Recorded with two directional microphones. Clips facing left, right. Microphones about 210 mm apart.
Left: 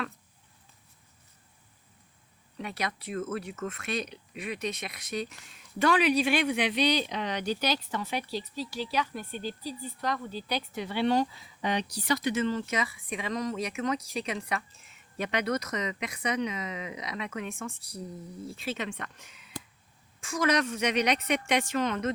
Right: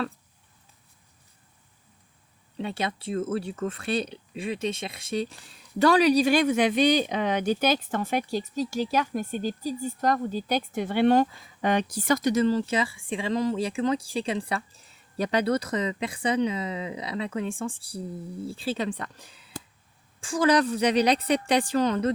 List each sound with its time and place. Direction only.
2.6 s speech: 25° right (ahead or behind)